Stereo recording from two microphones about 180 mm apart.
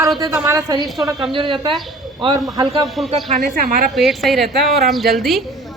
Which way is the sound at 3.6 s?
50° right (ahead or behind).